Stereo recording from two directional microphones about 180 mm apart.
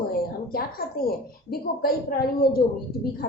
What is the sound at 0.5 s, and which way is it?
A woman's voice, 55° left (ahead or behind).